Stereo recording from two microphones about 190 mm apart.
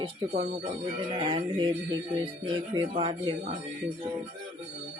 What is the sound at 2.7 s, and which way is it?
Speech, 25° right (ahead or behind).